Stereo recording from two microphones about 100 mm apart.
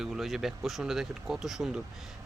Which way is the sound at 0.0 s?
Centre (ahead or behind).